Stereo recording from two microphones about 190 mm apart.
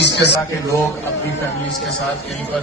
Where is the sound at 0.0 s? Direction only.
65° left (ahead or behind).